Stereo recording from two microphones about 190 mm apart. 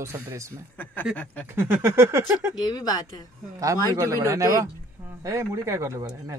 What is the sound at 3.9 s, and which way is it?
Speech, 15° right (ahead or behind).